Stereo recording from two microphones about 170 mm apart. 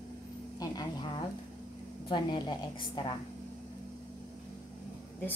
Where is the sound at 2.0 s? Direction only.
25° left (ahead or behind).